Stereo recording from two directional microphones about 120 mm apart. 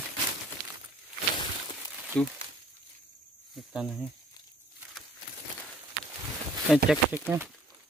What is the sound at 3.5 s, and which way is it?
Speech, 5° right (ahead or behind).